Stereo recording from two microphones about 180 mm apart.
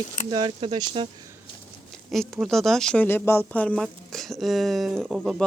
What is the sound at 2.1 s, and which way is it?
Speech, centre (ahead or behind).